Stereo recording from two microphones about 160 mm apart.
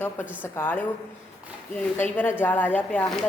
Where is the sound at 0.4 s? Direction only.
15° left (ahead or behind).